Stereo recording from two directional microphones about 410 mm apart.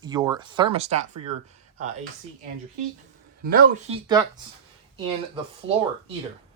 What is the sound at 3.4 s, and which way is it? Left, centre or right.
Speech, right.